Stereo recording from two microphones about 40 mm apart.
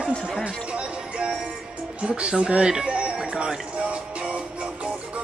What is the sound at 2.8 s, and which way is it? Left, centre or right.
Music, right.